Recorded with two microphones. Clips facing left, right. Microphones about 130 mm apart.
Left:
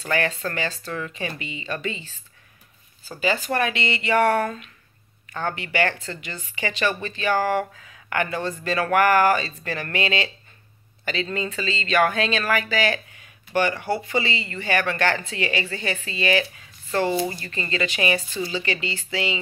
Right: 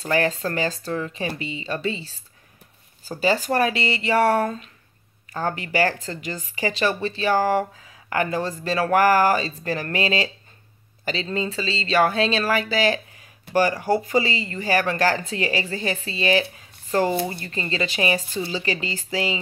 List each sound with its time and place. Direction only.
0.0 s speech: 35° right (ahead or behind)
16.5 s a sound: 40° right (ahead or behind)
17.3 s speech: 30° right (ahead or behind)